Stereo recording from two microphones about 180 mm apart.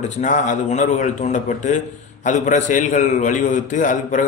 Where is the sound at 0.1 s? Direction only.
40° left (ahead or behind).